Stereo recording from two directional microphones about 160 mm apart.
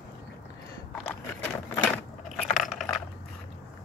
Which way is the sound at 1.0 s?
10° left (ahead or behind).